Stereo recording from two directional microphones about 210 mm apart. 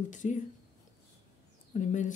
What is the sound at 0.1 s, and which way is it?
Speech, 35° left (ahead or behind).